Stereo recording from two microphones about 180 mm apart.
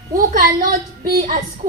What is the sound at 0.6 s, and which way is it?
Speech, 55° right (ahead or behind).